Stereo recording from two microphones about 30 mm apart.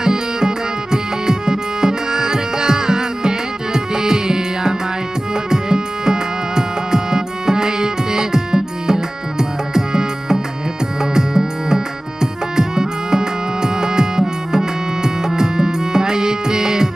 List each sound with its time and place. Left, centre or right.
0.0 s music: right